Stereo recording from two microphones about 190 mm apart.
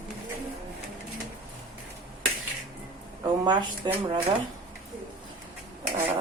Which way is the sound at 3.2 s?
20° right (ahead or behind).